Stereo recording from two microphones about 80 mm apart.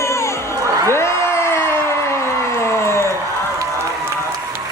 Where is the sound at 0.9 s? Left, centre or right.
Left.